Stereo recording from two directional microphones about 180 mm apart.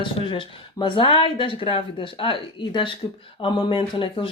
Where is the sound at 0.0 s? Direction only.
25° left (ahead or behind).